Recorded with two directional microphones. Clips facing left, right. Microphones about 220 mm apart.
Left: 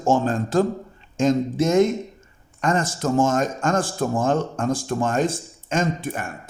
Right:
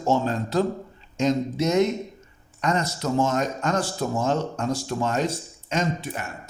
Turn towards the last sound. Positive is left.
turn(degrees=50)  # may be behind; listen again after turning